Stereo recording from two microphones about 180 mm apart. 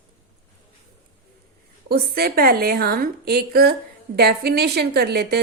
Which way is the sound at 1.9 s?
60° right (ahead or behind).